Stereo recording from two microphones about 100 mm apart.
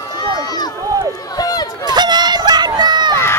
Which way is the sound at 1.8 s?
45° right (ahead or behind).